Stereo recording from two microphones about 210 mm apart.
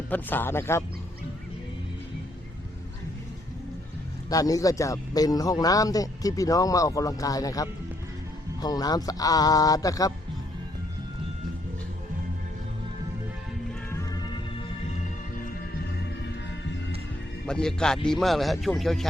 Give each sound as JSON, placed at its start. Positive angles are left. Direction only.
{"t": 0.1, "sound": "a man's voice", "side_deg": 10}
{"t": 4.3, "sound": "a man's voice", "side_deg": 15}
{"t": 13.9, "sound": "music", "side_deg": 15}
{"t": 17.4, "sound": "speech", "side_deg": 5}